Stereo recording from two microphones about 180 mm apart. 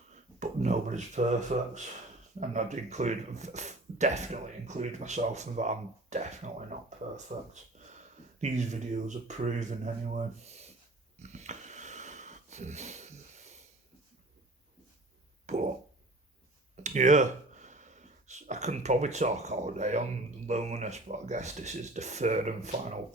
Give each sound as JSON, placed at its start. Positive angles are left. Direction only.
{"t": 0.1, "sound": "speech", "side_deg": -40}
{"t": 11.2, "sound": "a sound", "side_deg": -40}
{"t": 15.5, "sound": "speech", "side_deg": -40}
{"t": 16.7, "sound": "speech", "side_deg": -40}